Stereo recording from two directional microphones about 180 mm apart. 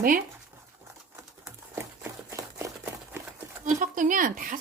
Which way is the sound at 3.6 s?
45° right (ahead or behind).